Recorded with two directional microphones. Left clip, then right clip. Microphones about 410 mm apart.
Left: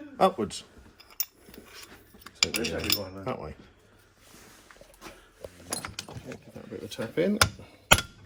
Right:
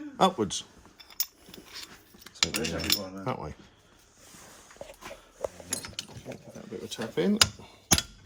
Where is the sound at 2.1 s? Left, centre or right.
Centre.